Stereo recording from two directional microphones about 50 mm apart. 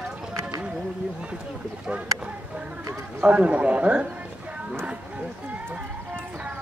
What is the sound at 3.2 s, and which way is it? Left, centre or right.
Speech, right.